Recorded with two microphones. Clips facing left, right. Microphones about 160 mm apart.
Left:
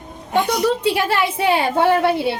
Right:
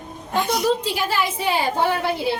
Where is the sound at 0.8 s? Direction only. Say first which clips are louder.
Left 5 dB; 65° left (ahead or behind).